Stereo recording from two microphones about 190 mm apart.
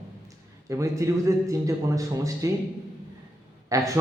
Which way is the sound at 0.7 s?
15° right (ahead or behind).